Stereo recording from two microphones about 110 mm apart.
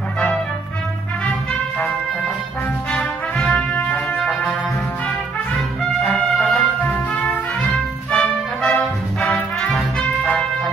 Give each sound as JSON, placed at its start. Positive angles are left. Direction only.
{"t": 2.9, "sound": "brass instrument", "side_deg": 10}
{"t": 4.2, "sound": "music", "side_deg": 0}
{"t": 6.1, "sound": "music", "side_deg": 10}
{"t": 7.2, "sound": "music", "side_deg": 5}